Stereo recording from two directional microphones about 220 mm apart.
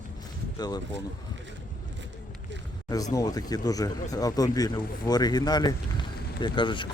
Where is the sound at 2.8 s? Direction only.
15° left (ahead or behind).